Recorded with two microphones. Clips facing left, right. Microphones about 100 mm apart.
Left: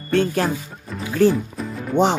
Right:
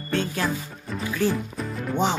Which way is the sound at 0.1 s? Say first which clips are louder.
Left 7 dB; 55° left (ahead or behind).